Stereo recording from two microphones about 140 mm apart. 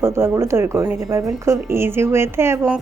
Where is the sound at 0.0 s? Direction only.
20° right (ahead or behind).